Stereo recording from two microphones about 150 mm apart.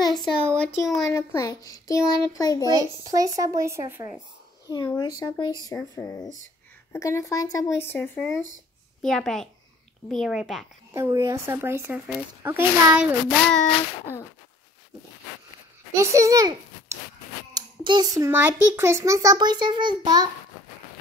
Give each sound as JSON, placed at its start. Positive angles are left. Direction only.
{"t": 0.0, "sound": "a sound", "side_deg": 30}
{"t": 0.6, "sound": "a woman's voice", "side_deg": 0}
{"t": 1.1, "sound": "a child's voice", "side_deg": 20}
{"t": 2.7, "sound": "a child's voice", "side_deg": -25}
{"t": 4.7, "sound": "a child's voice", "side_deg": 25}
{"t": 5.7, "sound": "a child's voice", "side_deg": 15}
{"t": 9.0, "sound": "a woman's voice", "side_deg": 5}
{"t": 10.9, "sound": "speech", "side_deg": -20}
{"t": 16.0, "sound": "a child's voice", "side_deg": -20}
{"t": 17.6, "sound": "a child's voice", "side_deg": -30}